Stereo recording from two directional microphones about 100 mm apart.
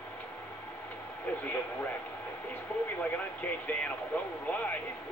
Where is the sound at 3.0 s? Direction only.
15° left (ahead or behind).